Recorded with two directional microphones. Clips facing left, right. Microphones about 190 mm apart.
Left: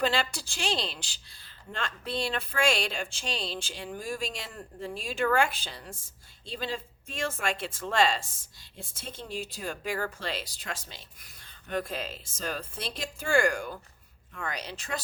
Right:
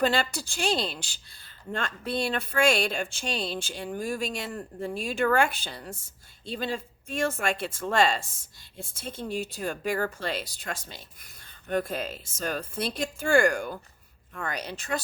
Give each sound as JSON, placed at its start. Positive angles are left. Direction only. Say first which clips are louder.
{"t": 0.0, "sound": "speech", "louder": "right 3 dB", "side_deg": -45}